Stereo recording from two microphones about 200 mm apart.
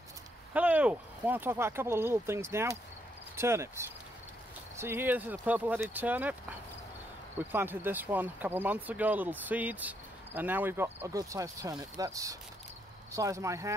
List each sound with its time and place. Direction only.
0.5 s speech: 5° right (ahead or behind)
7.3 s speech: 10° right (ahead or behind)